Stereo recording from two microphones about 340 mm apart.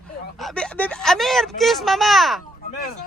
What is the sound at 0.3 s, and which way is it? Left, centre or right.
Speech, centre.